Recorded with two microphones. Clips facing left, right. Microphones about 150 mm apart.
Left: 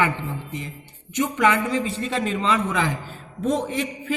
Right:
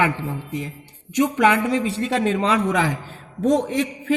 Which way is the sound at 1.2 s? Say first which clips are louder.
Right 2 dB; 75° right (ahead or behind).